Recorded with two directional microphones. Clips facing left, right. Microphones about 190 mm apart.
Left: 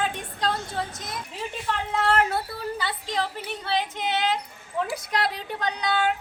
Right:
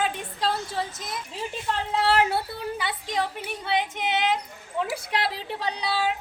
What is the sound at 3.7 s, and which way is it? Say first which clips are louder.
Female singing: right 1 dB; 20° right (ahead or behind).